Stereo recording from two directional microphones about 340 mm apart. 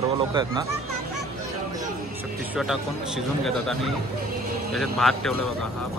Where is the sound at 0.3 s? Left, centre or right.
Centre.